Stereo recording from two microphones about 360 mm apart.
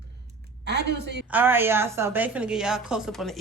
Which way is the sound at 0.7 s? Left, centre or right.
Right.